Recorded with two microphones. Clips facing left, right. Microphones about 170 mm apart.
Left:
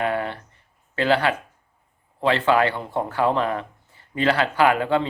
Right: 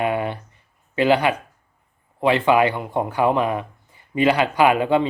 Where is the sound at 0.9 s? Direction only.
15° right (ahead or behind).